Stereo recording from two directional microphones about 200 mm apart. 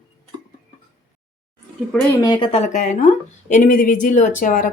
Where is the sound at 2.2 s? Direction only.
25° left (ahead or behind); by 4.7 s 40° left (ahead or behind).